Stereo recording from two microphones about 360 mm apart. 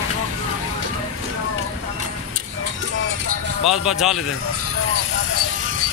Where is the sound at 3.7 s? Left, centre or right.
Centre.